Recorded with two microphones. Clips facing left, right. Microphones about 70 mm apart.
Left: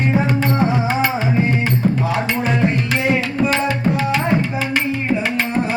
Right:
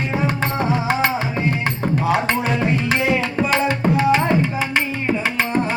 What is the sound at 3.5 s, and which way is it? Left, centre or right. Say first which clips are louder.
Tabla: even; right.